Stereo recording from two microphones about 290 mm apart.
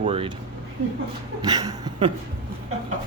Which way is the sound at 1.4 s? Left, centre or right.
Centre.